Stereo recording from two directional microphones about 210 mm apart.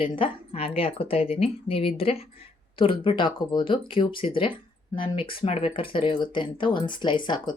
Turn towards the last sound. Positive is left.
turn(degrees=20)  # may be behind; listen again after turning